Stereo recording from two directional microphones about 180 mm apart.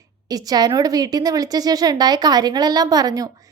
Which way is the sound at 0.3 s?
20° right (ahead or behind).